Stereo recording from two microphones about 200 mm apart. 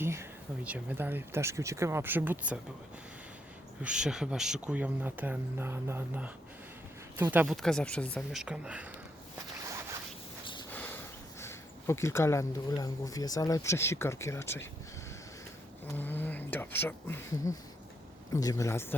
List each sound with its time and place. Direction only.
0.0 s speech: 10° right (ahead or behind)
3.8 s speech: 5° right (ahead or behind)
10.4 s a sound: 25° left (ahead or behind)
10.7 s a sound: 10° left (ahead or behind)
11.3 s speech: 15° left (ahead or behind)
16.0 s speech: 10° left (ahead or behind)